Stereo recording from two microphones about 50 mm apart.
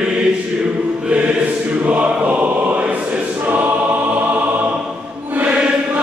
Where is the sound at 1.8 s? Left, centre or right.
Right.